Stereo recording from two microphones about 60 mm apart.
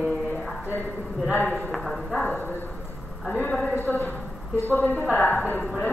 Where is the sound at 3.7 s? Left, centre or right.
Left.